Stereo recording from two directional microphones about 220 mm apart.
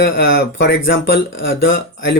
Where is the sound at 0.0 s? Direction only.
50° left (ahead or behind).